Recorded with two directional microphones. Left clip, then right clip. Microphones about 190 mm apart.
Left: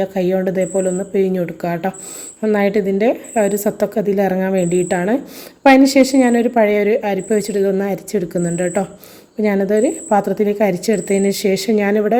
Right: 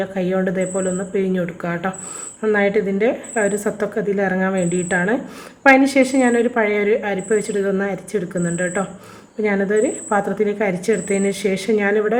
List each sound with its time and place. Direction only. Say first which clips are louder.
0.0 s a woman's voice: left 3 dB; 45° left (ahead or behind)